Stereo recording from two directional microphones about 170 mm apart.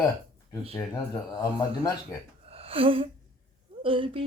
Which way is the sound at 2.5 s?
35° right (ahead or behind).